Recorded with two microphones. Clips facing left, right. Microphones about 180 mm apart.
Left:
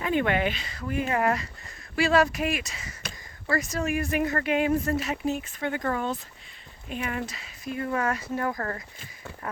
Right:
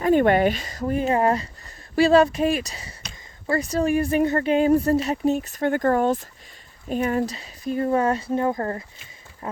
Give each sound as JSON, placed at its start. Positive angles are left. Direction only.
{"t": 0.0, "sound": "speech", "side_deg": -45}
{"t": 6.8, "sound": "speech", "side_deg": -40}
{"t": 9.4, "sound": "a sound", "side_deg": -25}